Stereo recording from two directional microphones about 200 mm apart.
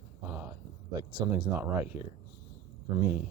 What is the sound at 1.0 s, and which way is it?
Speech, 15° right (ahead or behind).